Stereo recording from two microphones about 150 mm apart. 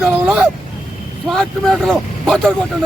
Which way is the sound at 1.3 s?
5° left (ahead or behind).